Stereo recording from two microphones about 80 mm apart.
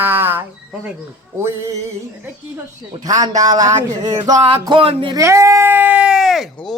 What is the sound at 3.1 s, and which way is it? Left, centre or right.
Speech, right.